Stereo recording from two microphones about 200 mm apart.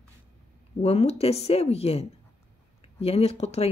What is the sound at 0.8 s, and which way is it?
Speech, 30° left (ahead or behind).